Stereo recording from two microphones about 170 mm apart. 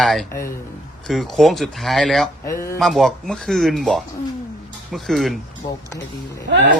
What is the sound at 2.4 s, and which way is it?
Speech, 15° left (ahead or behind).